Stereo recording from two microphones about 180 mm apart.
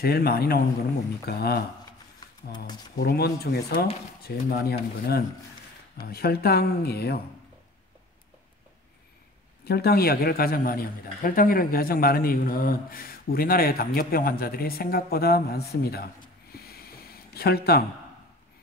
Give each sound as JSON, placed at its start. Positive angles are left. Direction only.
{"t": 0.0, "sound": "speech", "side_deg": 60}
{"t": 2.1, "sound": "a sound", "side_deg": 25}
{"t": 3.0, "sound": "speech", "side_deg": 60}
{"t": 9.7, "sound": "speech", "side_deg": 60}
{"t": 16.5, "sound": "snort", "side_deg": 60}